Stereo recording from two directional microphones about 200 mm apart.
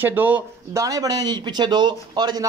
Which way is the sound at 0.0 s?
10° right (ahead or behind).